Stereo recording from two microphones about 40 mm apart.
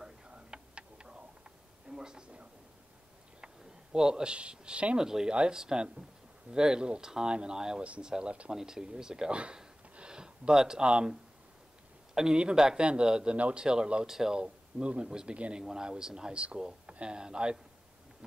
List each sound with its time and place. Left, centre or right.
0.3 s tick-tock: right
1.9 s a sound: centre
3.9 s speech: centre
4.9 s speech: centre
8.5 s speech: centre
9.9 s a sound: right
10.9 s a man's voice: right
12.8 s speech: right
14.4 s speech: right